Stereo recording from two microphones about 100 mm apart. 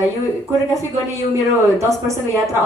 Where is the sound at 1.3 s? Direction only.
30° right (ahead or behind).